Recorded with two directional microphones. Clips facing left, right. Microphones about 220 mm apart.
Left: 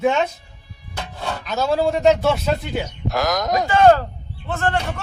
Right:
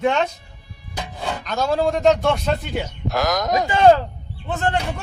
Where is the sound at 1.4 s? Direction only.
5° left (ahead or behind).